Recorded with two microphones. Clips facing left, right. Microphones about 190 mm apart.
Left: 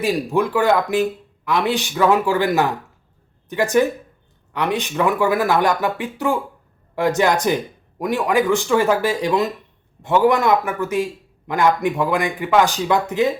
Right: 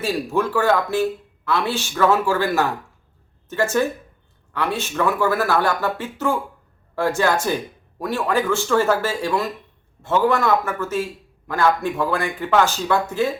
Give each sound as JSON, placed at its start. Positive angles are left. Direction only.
{"t": 0.0, "sound": "a man's voice", "side_deg": 15}